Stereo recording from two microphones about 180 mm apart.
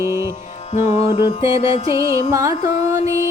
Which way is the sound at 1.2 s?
20° right (ahead or behind).